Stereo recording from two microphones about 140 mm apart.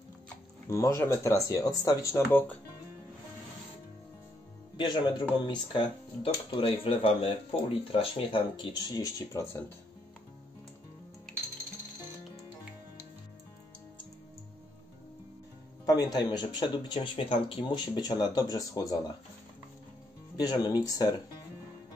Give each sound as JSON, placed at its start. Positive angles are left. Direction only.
{"t": 0.7, "sound": "speech", "side_deg": 20}
{"t": 4.7, "sound": "speech", "side_deg": 35}
{"t": 15.8, "sound": "speech", "side_deg": 25}
{"t": 20.3, "sound": "speech", "side_deg": 30}